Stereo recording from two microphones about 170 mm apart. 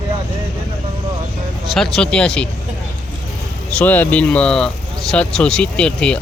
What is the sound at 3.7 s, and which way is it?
Speech, 10° left (ahead or behind).